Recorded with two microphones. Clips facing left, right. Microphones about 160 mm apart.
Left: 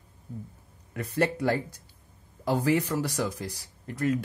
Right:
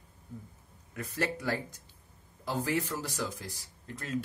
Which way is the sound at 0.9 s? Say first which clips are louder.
Left 7 dB; 60° left (ahead or behind).